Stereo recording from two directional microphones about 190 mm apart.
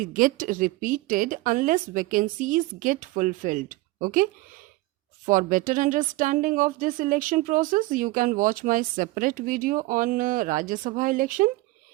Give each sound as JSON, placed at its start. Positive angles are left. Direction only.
{"t": 0.0, "sound": "a woman's voice", "side_deg": -45}